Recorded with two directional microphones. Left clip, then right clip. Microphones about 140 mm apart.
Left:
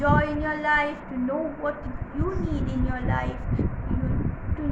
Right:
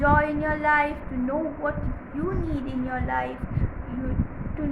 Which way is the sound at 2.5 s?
15° right (ahead or behind).